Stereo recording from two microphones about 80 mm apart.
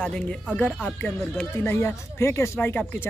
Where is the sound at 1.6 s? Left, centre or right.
Left.